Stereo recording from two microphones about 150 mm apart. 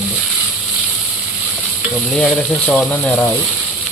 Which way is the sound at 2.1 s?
5° left (ahead or behind).